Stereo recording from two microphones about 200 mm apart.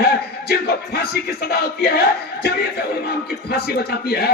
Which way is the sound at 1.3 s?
50° left (ahead or behind).